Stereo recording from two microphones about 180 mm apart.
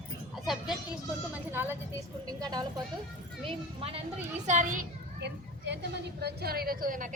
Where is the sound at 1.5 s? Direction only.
10° right (ahead or behind).